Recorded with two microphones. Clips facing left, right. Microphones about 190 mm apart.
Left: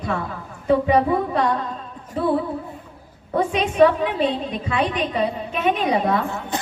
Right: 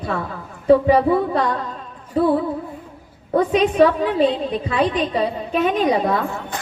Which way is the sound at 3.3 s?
35° right (ahead or behind).